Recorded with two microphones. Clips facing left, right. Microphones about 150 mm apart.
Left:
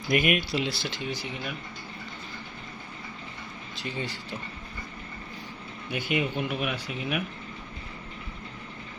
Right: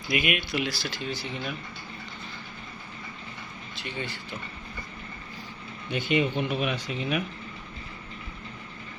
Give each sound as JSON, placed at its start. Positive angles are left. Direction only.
{"t": 0.1, "sound": "speech", "side_deg": 40}
{"t": 0.6, "sound": "speech", "side_deg": 25}
{"t": 3.8, "sound": "speech", "side_deg": 35}
{"t": 5.9, "sound": "speech", "side_deg": 10}